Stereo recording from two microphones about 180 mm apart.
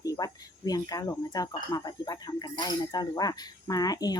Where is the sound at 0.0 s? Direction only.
20° left (ahead or behind).